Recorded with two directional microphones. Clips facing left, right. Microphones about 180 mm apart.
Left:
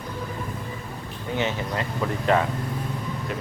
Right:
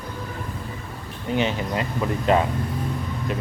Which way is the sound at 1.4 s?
15° right (ahead or behind).